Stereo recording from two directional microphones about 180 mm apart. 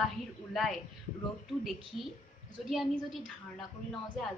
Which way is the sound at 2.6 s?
Centre (ahead or behind).